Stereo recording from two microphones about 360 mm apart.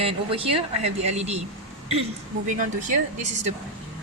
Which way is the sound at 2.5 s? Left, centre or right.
Right.